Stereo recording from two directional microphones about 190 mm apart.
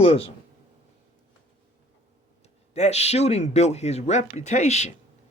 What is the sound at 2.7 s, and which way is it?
Speech, 35° left (ahead or behind).